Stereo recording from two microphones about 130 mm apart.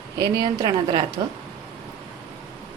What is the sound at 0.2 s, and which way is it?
Speech, 35° right (ahead or behind).